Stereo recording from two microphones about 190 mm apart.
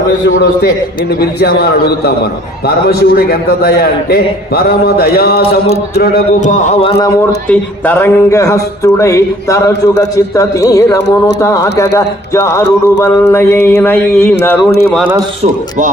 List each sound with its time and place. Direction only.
0.1 s a man's voice: 65° left (ahead or behind)
5.4 s speech: 35° left (ahead or behind)
5.9 s speech: 55° left (ahead or behind)
7.4 s speech: 10° left (ahead or behind)